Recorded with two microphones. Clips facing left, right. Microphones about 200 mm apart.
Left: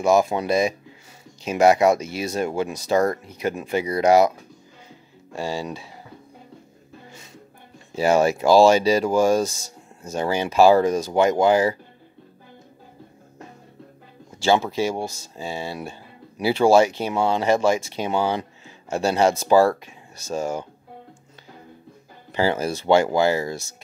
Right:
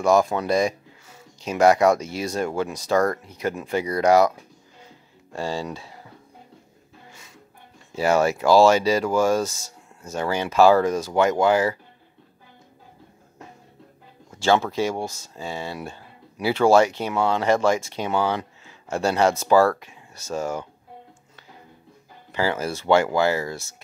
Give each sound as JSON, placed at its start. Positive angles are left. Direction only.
{"t": 0.0, "sound": "speech", "side_deg": 5}
{"t": 0.3, "sound": "speech", "side_deg": 20}
{"t": 2.0, "sound": "speech", "side_deg": 5}
{"t": 2.3, "sound": "speech", "side_deg": 25}
{"t": 5.3, "sound": "speech", "side_deg": 10}
{"t": 7.9, "sound": "speech", "side_deg": 15}
{"t": 14.4, "sound": "speech", "side_deg": 10}
{"t": 22.3, "sound": "speech", "side_deg": 20}